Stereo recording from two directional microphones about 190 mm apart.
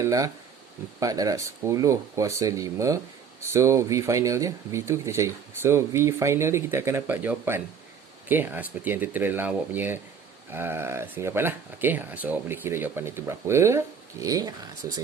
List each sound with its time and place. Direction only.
0.0 s speech: 20° right (ahead or behind)